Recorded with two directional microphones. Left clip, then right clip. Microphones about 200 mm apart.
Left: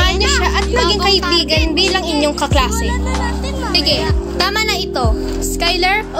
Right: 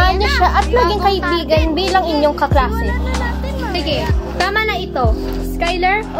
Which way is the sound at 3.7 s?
50° left (ahead or behind).